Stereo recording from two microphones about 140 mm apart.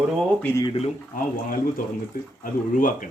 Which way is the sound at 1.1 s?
70° left (ahead or behind).